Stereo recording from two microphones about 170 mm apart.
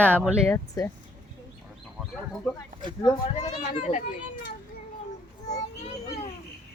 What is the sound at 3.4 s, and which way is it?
Speech, 40° left (ahead or behind).